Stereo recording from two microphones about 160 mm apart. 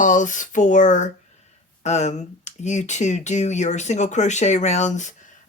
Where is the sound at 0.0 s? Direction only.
50° left (ahead or behind).